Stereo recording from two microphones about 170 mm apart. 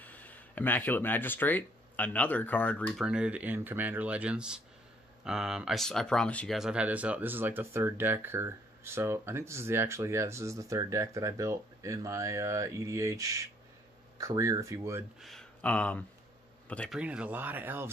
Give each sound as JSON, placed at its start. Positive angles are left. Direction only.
{"t": 0.0, "sound": "speech", "side_deg": 10}
{"t": 2.9, "sound": "speech", "side_deg": -5}
{"t": 15.1, "sound": "a man's voice", "side_deg": 0}
{"t": 17.0, "sound": "speech", "side_deg": -5}